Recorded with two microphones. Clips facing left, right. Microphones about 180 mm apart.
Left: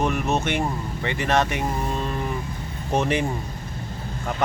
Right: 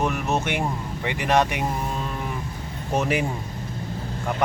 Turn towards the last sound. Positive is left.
turn(degrees=-5)  # may be behind; listen again after turning